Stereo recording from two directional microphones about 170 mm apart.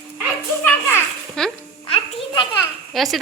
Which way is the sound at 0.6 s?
10° left (ahead or behind).